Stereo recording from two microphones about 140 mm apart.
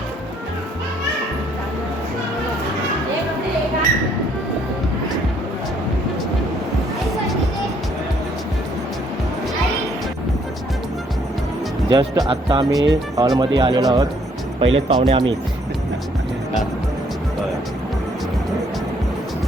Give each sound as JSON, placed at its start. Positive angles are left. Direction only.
{"t": 11.9, "sound": "speech", "side_deg": -30}
{"t": 14.6, "sound": "speech", "side_deg": -40}